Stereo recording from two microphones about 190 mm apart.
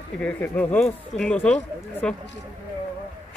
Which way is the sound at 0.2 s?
10° left (ahead or behind).